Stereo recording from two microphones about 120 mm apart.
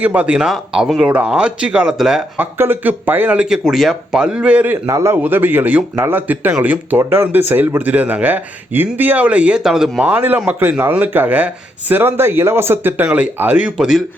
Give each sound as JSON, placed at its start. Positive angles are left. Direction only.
{"t": 0.0, "sound": "speech", "side_deg": -10}
{"t": 2.6, "sound": "speech", "side_deg": -15}
{"t": 4.9, "sound": "speech", "side_deg": -25}
{"t": 10.1, "sound": "speech", "side_deg": -15}